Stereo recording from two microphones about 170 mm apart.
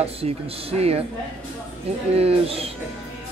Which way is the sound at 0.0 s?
35° right (ahead or behind).